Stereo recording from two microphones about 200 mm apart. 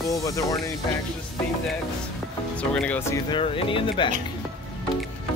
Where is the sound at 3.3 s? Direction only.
25° left (ahead or behind).